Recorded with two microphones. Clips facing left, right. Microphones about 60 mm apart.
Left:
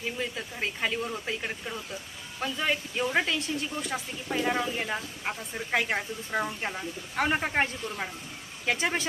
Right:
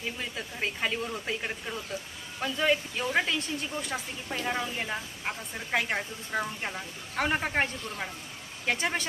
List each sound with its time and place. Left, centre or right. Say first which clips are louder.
0.2 s speech: left 1 dB; centre